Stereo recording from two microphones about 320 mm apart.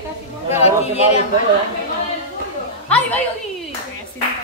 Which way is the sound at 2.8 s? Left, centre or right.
Centre.